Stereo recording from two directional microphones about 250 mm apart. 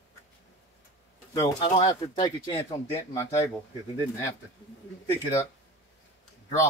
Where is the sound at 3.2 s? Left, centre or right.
Centre.